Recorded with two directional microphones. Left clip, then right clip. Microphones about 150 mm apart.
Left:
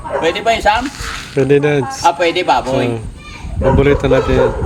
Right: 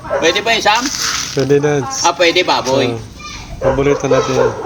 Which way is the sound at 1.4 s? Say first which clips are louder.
Left 2 dB; 30° left (ahead or behind).